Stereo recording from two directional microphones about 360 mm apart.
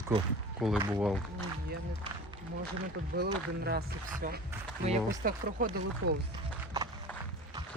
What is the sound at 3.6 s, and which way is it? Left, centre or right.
Speech, right.